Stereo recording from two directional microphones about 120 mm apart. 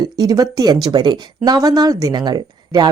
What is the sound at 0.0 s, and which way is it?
Speech, 30° right (ahead or behind).